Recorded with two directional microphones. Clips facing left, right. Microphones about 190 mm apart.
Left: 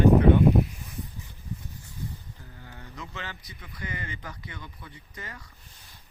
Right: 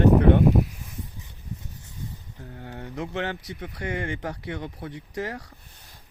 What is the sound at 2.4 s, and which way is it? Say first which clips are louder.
Speech: right 9 dB; 55° right (ahead or behind).